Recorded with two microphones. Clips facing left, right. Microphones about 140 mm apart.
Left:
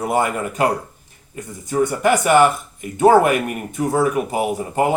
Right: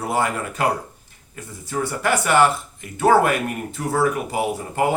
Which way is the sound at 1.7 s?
15° left (ahead or behind).